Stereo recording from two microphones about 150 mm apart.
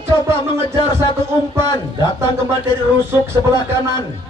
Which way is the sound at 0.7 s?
30° left (ahead or behind).